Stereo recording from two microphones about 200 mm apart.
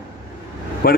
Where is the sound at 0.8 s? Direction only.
45° left (ahead or behind).